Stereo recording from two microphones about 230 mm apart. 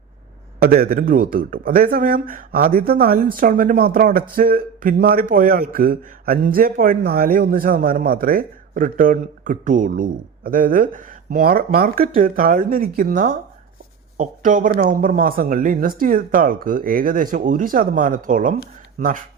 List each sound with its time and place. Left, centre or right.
0.6 s speech: right